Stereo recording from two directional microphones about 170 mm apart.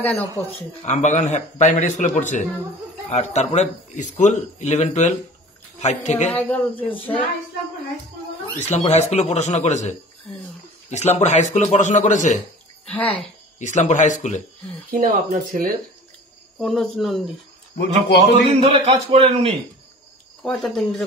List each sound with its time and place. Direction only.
0.6 s a man's voice: 45° left (ahead or behind)
6.3 s speech: 10° left (ahead or behind)
8.5 s a woman's voice: 40° left (ahead or behind)
12.8 s speech: 5° left (ahead or behind)
13.6 s a man's voice: 45° left (ahead or behind)
14.9 s speech: 55° right (ahead or behind)
16.5 s speech: centre (ahead or behind)
17.7 s a man's voice: 90° left
18.6 s a man's voice: 35° right (ahead or behind)
20.4 s speech: centre (ahead or behind)